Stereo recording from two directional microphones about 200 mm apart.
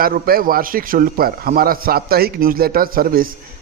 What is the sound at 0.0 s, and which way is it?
A man's voice, 45° right (ahead or behind).